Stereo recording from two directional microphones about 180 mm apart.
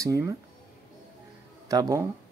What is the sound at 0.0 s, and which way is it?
Speech, 20° right (ahead or behind).